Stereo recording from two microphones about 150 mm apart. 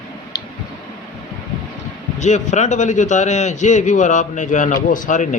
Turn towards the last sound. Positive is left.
turn(degrees=60)  # may be behind; listen again after turning